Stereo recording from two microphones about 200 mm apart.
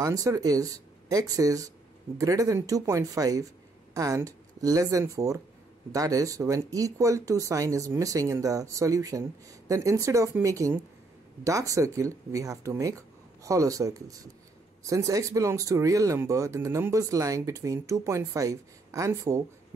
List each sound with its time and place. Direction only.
0.0 s speech: 15° right (ahead or behind)